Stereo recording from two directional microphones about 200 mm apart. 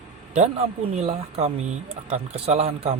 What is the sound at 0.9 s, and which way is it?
A man's voice, 30° right (ahead or behind).